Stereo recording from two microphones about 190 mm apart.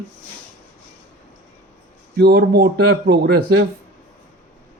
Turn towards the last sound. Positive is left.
turn(degrees=-55)  # may be behind; listen again after turning